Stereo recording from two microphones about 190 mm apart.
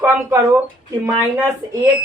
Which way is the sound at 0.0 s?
15° right (ahead or behind).